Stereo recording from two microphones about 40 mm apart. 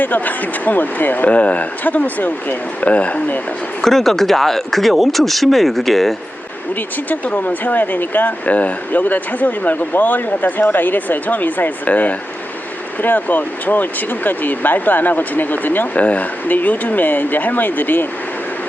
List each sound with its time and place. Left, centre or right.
0.0 s speech: left
3.8 s speech: centre
6.7 s speech: left
8.5 s speech: left
16.0 s speech: left